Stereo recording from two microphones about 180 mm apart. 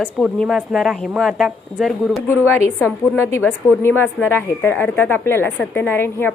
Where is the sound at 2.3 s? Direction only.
15° left (ahead or behind).